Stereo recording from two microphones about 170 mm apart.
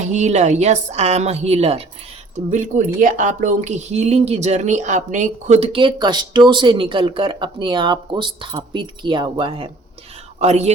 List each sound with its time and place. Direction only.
0.0 s a woman's voice: 45° right (ahead or behind)
2.5 s a woman's voice: 45° right (ahead or behind)